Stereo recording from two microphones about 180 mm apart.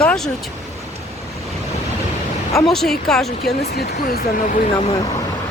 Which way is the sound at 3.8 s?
60° left (ahead or behind).